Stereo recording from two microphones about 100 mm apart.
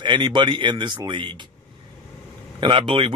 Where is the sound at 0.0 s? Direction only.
50° right (ahead or behind).